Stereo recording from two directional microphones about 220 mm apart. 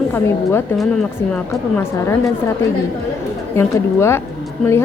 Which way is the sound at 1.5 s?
10° left (ahead or behind).